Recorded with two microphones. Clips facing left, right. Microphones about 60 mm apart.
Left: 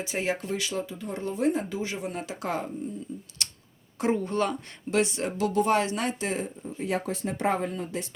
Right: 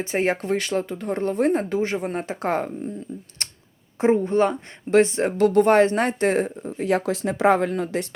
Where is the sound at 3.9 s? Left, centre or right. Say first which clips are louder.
Right 7 dB; right.